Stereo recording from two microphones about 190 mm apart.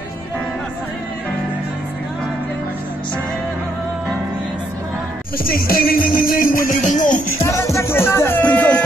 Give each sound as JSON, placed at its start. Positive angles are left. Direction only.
{"t": 5.4, "sound": "music", "side_deg": 50}
{"t": 7.4, "sound": "music", "side_deg": 15}